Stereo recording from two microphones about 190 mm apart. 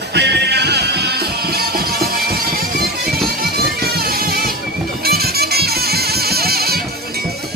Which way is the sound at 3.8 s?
55° right (ahead or behind).